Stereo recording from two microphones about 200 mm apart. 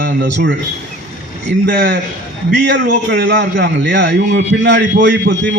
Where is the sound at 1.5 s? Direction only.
60° right (ahead or behind).